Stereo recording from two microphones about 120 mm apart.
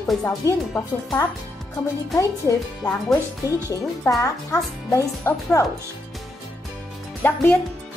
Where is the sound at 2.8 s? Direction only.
35° left (ahead or behind).